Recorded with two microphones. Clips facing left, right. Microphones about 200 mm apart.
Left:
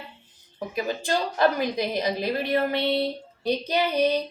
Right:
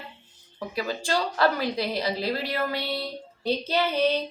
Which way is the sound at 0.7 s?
20° left (ahead or behind).